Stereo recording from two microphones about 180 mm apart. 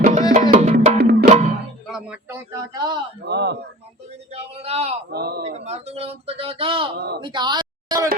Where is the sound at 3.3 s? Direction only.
70° right (ahead or behind).